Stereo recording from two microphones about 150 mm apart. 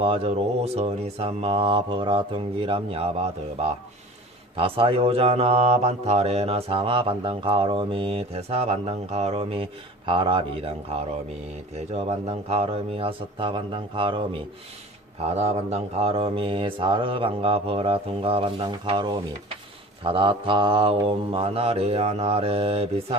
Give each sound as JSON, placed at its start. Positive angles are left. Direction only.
{"t": 0.0, "sound": "speech", "side_deg": -40}
{"t": 4.5, "sound": "speech", "side_deg": -35}
{"t": 11.9, "sound": "speech", "side_deg": -45}
{"t": 15.4, "sound": "speech", "side_deg": -45}